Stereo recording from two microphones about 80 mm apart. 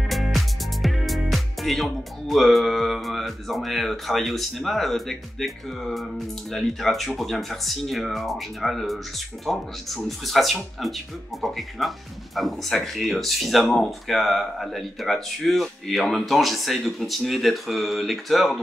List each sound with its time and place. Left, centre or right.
0.1 s speech: centre